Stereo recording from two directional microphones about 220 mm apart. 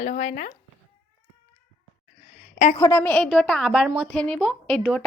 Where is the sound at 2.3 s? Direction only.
35° left (ahead or behind).